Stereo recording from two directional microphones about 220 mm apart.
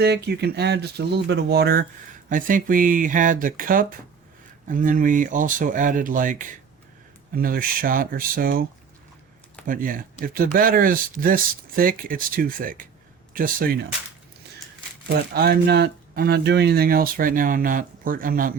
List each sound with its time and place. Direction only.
0.0 s speech: 45° right (ahead or behind)
9.6 s speech: 40° right (ahead or behind)
15.3 s speech: 45° right (ahead or behind)